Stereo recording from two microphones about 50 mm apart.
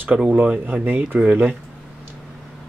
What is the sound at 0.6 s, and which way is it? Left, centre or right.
Speech, right.